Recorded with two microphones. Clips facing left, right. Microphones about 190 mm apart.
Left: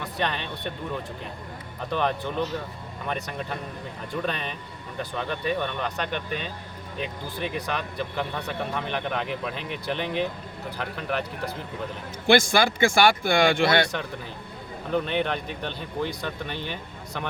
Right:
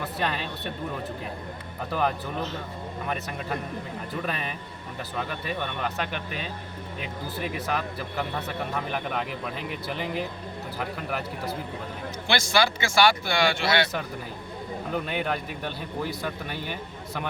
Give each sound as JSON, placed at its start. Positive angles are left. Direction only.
{"t": 0.0, "sound": "speech", "side_deg": -5}
{"t": 1.9, "sound": "speech", "side_deg": -5}
{"t": 12.3, "sound": "speech", "side_deg": 50}
{"t": 14.9, "sound": "speech", "side_deg": -5}